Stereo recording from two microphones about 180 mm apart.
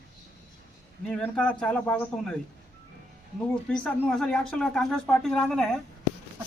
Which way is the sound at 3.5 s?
5° left (ahead or behind).